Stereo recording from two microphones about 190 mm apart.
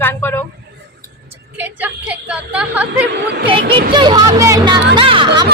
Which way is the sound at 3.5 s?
25° right (ahead or behind).